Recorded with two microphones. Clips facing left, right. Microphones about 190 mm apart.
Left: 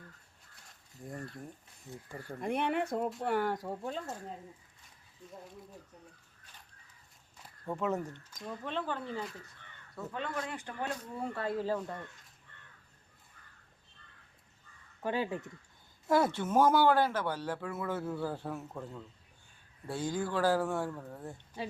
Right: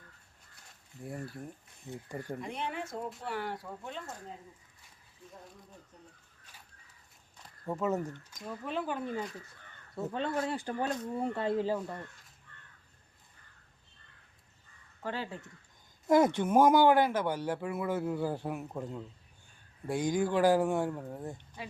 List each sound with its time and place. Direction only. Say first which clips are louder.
1.0 s speech: right 2 dB; 5° right (ahead or behind)
2.0 s speech: right 5 dB; 15° right (ahead or behind)
2.4 s speech: left 6 dB; 60° left (ahead or behind)
3.2 s speech: left 6 dB; 50° left (ahead or behind)
7.6 s speech: right 2 dB; 5° right (ahead or behind)
9.9 s speech: right 5 dB; 30° right (ahead or behind); by 12.0 s 10° right (ahead or behind)
15.0 s speech: left 4 dB; 15° left (ahead or behind)
16.0 s speech: right 4 dB; 15° right (ahead or behind)